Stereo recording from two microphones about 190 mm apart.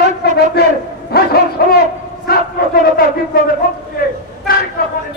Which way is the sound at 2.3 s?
55° left (ahead or behind).